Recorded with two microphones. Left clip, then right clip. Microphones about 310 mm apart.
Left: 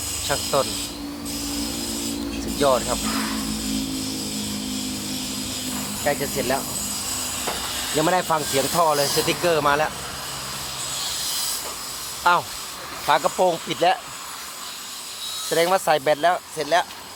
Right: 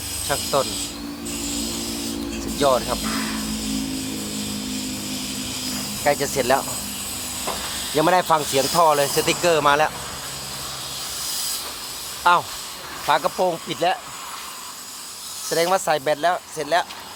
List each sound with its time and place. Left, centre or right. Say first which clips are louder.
0.3 s speech: right 1 dB; centre
2.6 s speech: right 1 dB; centre
6.1 s speech: right 4 dB; centre
7.9 s speech: right 3 dB; centre
12.2 s speech: right 2 dB; centre
15.4 s speech: even; centre